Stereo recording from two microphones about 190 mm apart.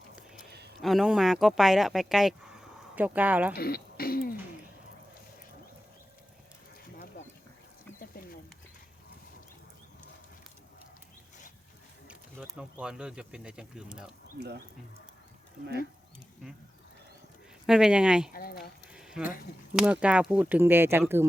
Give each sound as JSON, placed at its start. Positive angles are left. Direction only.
{"t": 0.8, "sound": "speech", "side_deg": 0}
{"t": 3.5, "sound": "speech", "side_deg": 55}
{"t": 12.0, "sound": "speech", "side_deg": -5}
{"t": 14.3, "sound": "speech", "side_deg": -60}
{"t": 17.7, "sound": "speech", "side_deg": -5}
{"t": 18.3, "sound": "speech", "side_deg": 50}
{"t": 18.9, "sound": "a sound", "side_deg": -5}
{"t": 19.7, "sound": "speech", "side_deg": -5}